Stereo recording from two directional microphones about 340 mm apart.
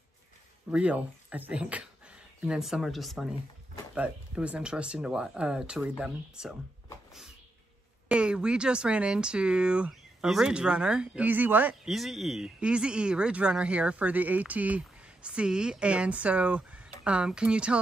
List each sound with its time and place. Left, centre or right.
0.7 s speech: centre
8.1 s speech: centre